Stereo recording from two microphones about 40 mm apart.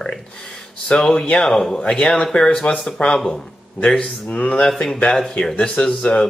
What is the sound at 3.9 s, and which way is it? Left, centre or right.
Speech, centre.